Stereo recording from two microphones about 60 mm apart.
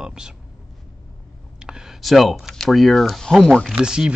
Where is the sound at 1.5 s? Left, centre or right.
Centre.